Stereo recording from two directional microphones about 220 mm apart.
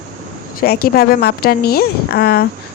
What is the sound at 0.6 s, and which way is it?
A woman's voice, 45° left (ahead or behind).